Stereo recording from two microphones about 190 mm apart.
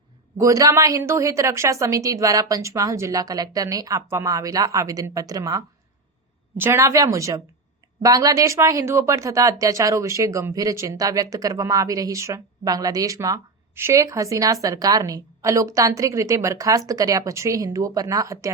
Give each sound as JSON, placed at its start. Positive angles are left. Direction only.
{"t": 0.3, "sound": "speech", "side_deg": -15}